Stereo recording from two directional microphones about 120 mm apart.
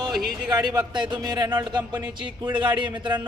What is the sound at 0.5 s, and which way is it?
Speech, 35° right (ahead or behind).